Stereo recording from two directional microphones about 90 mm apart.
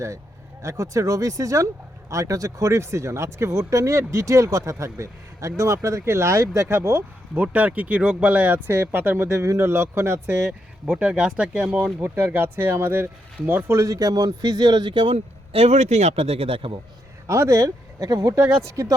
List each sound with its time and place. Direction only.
0.6 s speech: 35° right (ahead or behind)
7.3 s speech: 15° right (ahead or behind)
10.8 s speech: 10° right (ahead or behind)
11.9 s speech: 25° right (ahead or behind); by 15.1 s 65° right (ahead or behind)
15.5 s speech: 90° right
17.2 s speech: 35° right (ahead or behind)